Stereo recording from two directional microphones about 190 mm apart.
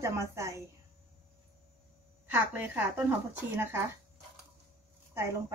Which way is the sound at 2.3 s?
10° right (ahead or behind).